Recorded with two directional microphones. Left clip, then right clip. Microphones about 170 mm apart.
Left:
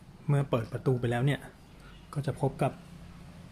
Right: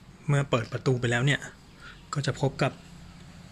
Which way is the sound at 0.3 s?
Centre (ahead or behind).